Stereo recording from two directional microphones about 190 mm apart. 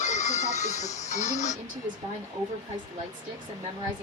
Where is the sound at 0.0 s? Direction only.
40° left (ahead or behind).